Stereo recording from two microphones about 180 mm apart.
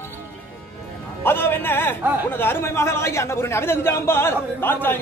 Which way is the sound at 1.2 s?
10° left (ahead or behind).